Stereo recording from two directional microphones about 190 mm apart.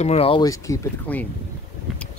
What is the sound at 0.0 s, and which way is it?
Speech, 30° left (ahead or behind).